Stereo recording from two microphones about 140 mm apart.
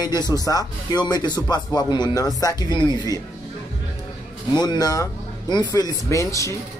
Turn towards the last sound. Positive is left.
turn(degrees=20)  # may be behind; listen again after turning